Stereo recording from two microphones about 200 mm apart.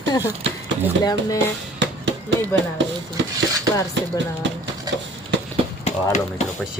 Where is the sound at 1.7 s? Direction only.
65° right (ahead or behind).